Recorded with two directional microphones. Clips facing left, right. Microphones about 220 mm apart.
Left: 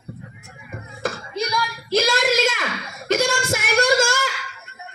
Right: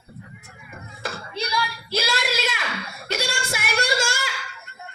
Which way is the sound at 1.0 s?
45° left (ahead or behind).